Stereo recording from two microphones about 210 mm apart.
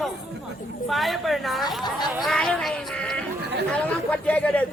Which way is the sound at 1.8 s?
20° left (ahead or behind).